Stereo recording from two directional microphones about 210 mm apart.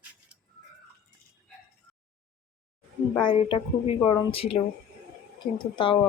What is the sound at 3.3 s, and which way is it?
A woman's voice, 25° left (ahead or behind).